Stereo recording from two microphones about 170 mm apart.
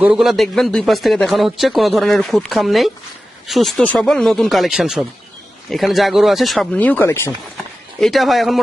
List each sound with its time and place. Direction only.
0.0 s speech: 5° right (ahead or behind); by 7.3 s 15° left (ahead or behind)
7.9 s speech: centre (ahead or behind)